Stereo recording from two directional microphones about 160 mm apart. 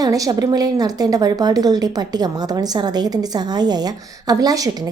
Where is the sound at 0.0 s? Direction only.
20° right (ahead or behind).